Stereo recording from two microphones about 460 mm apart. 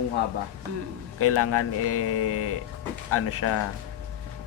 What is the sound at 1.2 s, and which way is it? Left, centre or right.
Speech, left.